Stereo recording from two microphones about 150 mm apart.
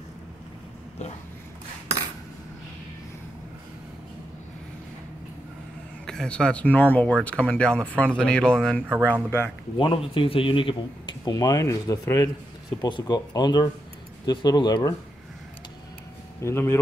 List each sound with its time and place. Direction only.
6.0 s speech: 5° left (ahead or behind)
9.8 s speech: 35° left (ahead or behind)
16.4 s speech: 15° left (ahead or behind)